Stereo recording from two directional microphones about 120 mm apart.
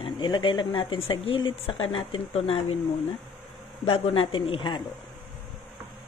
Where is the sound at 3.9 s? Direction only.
55° left (ahead or behind).